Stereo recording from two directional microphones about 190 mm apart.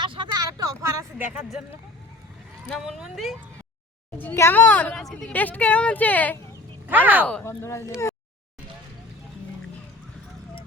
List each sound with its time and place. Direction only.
0.0 s a sound: 25° right (ahead or behind)
1.5 s speech: 5° right (ahead or behind)
4.2 s speech: 10° left (ahead or behind)
6.8 s speech: 10° right (ahead or behind)
7.3 s speech: 10° left (ahead or behind)